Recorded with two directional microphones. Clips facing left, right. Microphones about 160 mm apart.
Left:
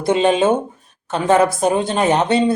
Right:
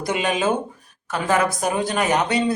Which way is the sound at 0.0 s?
30° left (ahead or behind).